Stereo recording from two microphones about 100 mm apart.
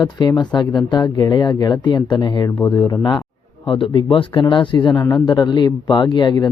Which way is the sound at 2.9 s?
45° left (ahead or behind).